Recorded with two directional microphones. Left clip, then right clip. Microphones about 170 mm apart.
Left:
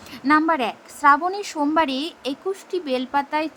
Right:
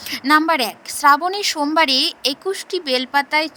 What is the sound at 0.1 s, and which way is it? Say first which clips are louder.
A woman's voice: right 3 dB; 60° right (ahead or behind).